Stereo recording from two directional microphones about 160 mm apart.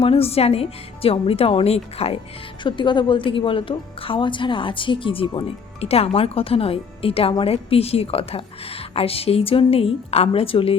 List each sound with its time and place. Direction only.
0.0 s a woman's voice: 35° left (ahead or behind)